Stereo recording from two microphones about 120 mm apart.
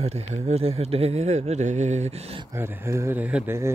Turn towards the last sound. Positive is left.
turn(degrees=-10)  # may be behind; listen again after turning